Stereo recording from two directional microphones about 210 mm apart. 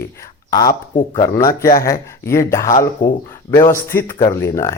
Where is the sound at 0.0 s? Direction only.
15° left (ahead or behind).